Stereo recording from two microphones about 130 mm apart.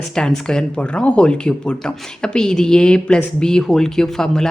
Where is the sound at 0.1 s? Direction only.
5° left (ahead or behind).